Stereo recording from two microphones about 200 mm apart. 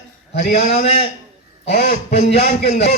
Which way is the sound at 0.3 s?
50° left (ahead or behind).